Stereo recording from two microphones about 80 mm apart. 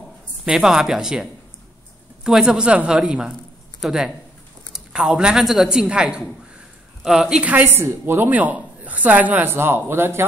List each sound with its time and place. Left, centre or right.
0.5 s a man's voice: centre; by 10.2 s right